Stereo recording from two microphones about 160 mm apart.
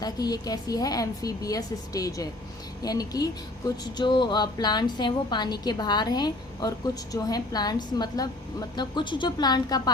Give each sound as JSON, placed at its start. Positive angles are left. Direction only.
{"t": 0.0, "sound": "a woman's voice", "side_deg": 25}